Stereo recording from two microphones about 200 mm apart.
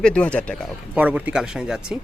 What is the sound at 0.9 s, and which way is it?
Speech, 5° right (ahead or behind).